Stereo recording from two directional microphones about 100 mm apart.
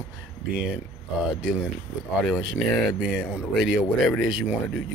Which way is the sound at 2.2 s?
5° right (ahead or behind).